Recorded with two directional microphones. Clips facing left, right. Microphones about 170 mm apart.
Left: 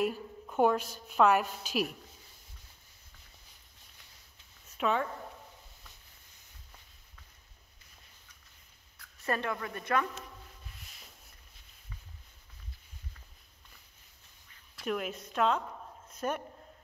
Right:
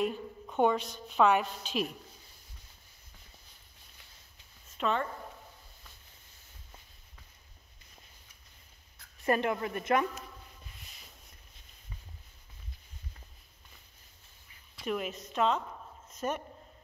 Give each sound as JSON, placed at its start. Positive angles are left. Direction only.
{"t": 0.0, "sound": "a woman's voice", "side_deg": 5}
{"t": 4.7, "sound": "speech", "side_deg": 5}
{"t": 8.9, "sound": "a woman's voice", "side_deg": -20}
{"t": 14.8, "sound": "a woman's voice", "side_deg": 0}